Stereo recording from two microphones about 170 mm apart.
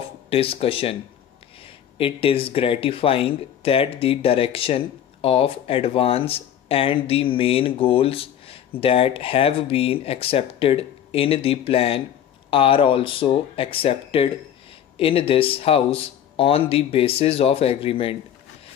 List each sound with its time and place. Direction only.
0.3 s speech: 35° left (ahead or behind)